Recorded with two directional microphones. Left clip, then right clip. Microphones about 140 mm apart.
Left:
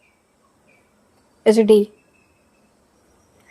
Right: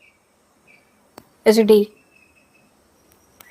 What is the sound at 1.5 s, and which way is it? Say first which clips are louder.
Speech: even; 15° left (ahead or behind).